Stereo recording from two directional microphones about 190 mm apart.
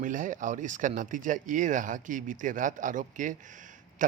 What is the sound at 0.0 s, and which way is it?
Speech, 45° right (ahead or behind).